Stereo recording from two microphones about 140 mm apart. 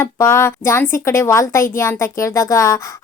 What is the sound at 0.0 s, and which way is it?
A woman's voice, 20° left (ahead or behind).